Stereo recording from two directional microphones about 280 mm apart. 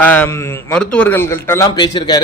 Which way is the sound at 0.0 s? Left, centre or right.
Centre.